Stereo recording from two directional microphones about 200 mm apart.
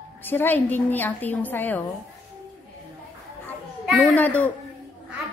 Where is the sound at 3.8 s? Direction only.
Centre (ahead or behind).